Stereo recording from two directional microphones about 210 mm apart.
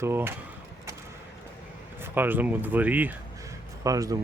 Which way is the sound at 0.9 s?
15° right (ahead or behind).